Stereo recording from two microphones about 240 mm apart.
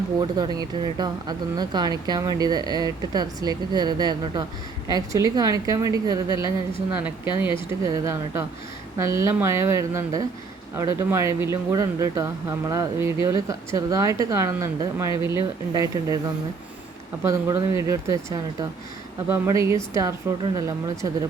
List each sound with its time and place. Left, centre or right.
0.3 s speech: centre